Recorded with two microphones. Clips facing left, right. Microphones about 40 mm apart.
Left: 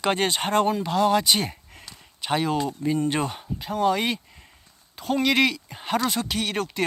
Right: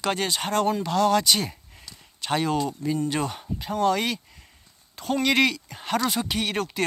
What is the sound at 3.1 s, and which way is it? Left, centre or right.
Speech, centre.